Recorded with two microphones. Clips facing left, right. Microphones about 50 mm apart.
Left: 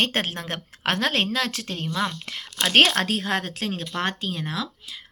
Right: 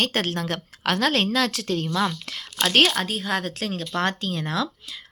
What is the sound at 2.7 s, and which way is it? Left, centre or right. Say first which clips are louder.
Speech: left 2 dB; left.